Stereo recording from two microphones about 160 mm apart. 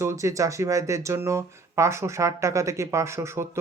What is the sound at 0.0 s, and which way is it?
Speech, 20° right (ahead or behind).